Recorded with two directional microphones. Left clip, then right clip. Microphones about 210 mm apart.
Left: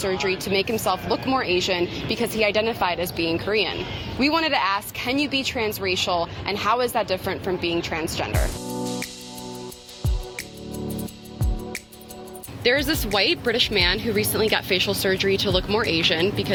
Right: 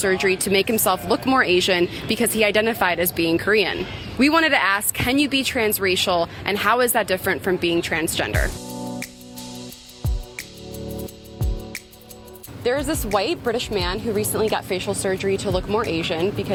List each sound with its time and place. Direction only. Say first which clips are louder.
0.0 s speech: right 4 dB; 45° right (ahead or behind)
8.3 s music: right 3 dB; centre (ahead or behind)
12.6 s speech: left 1 dB; centre (ahead or behind)